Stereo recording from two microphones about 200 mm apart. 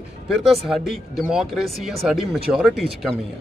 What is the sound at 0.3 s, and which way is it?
Speech, centre (ahead or behind).